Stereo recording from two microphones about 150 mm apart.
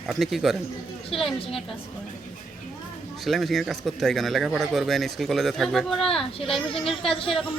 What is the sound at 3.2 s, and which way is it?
Speech, centre (ahead or behind).